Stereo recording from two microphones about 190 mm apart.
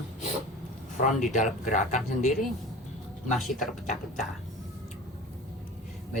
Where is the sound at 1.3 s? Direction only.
40° left (ahead or behind).